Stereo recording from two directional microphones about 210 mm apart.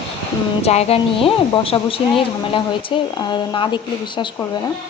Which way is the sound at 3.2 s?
20° left (ahead or behind).